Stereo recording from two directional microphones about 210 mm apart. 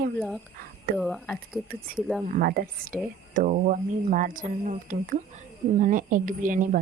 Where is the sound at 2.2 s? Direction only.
45° right (ahead or behind).